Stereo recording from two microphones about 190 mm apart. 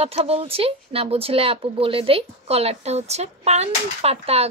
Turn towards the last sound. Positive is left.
turn(degrees=-30)  # may be behind; listen again after turning